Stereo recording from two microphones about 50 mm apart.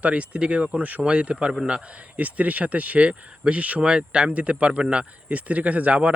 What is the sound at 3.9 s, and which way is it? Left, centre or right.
Speech, centre.